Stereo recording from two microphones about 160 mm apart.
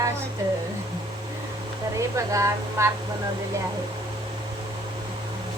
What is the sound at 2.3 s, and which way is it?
Speech, 20° right (ahead or behind).